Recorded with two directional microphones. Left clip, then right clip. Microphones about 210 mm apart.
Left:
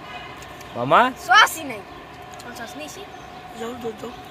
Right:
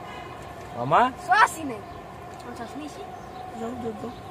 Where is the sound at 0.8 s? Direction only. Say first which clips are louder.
Left 4 dB; 40° left (ahead or behind).